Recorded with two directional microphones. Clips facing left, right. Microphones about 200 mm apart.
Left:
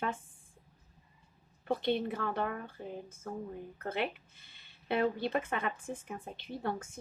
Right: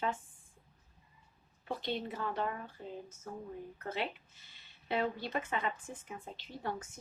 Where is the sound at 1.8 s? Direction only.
60° left (ahead or behind).